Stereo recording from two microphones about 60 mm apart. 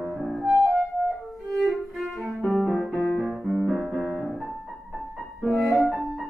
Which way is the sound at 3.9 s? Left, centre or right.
Centre.